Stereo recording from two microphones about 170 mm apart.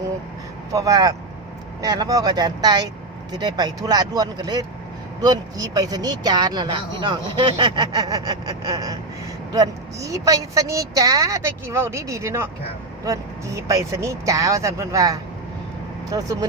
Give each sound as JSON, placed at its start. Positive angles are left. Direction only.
{"t": 0.7, "sound": "speech", "side_deg": -20}